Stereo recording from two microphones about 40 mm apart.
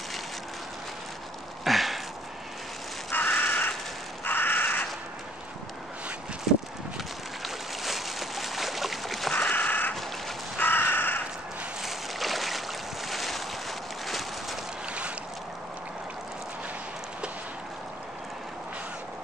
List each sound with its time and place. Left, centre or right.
1.6 s a sound: centre
3.1 s crow: left
4.2 s crow: left
7.4 s boat: centre
9.5 s a sound: left
10.6 s crow: left
11.8 s boat: centre
14.9 s boat: right